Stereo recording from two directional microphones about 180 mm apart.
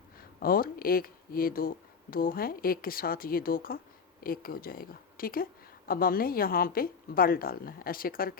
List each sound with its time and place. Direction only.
0.2 s a woman's voice: 55° left (ahead or behind)